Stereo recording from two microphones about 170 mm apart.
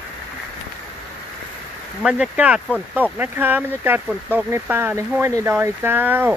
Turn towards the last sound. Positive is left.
turn(degrees=-10)  # may be behind; listen again after turning